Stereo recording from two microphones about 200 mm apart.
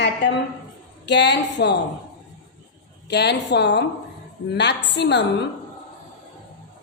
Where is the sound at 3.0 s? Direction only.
55° left (ahead or behind).